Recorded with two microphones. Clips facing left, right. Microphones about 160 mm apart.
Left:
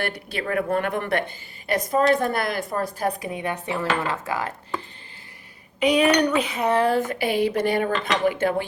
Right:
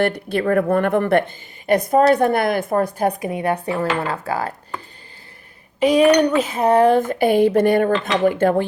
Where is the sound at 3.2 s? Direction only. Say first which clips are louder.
Right 7 dB; 40° right (ahead or behind).